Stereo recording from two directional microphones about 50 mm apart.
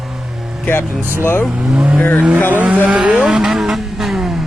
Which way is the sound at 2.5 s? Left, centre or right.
Right.